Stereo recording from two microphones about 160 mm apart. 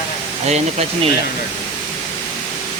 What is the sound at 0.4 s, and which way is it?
Speech, 40° right (ahead or behind).